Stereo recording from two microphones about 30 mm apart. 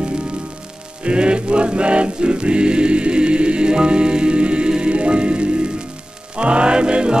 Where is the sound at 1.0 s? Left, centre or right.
Right.